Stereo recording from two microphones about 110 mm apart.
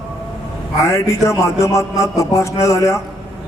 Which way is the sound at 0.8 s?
25° left (ahead or behind).